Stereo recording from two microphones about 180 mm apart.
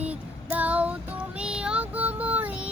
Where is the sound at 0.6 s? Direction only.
10° right (ahead or behind).